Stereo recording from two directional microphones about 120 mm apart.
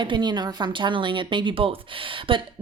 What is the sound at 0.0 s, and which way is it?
Speech, 40° right (ahead or behind).